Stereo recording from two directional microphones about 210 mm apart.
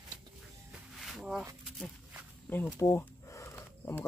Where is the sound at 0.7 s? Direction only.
Centre (ahead or behind).